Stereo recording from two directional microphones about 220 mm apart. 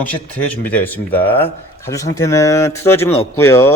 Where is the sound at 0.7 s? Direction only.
5° left (ahead or behind).